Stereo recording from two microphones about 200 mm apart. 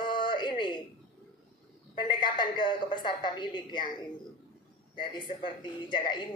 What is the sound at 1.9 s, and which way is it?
Speech, 25° left (ahead or behind).